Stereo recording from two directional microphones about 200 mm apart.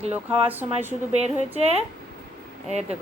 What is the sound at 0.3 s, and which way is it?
Speech, 10° right (ahead or behind).